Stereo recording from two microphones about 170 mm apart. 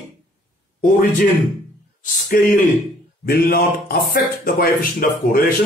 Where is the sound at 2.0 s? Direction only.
50° left (ahead or behind).